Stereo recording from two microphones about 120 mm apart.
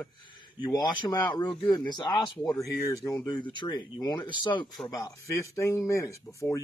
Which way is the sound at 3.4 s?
40° left (ahead or behind).